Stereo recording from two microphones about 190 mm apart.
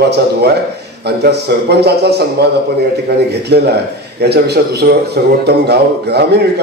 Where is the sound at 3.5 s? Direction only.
60° right (ahead or behind).